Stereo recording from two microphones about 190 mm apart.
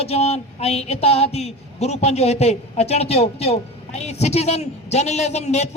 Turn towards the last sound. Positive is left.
turn(degrees=35)  # may be behind; listen again after turning